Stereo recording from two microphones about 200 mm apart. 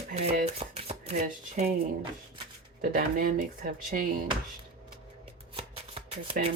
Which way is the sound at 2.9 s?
45° right (ahead or behind).